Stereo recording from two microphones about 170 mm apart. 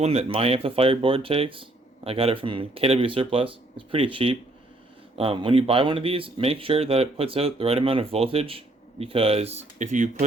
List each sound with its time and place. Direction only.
0.0 s speech: 40° right (ahead or behind)